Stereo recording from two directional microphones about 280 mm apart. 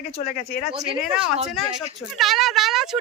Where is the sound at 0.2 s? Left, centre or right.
Left.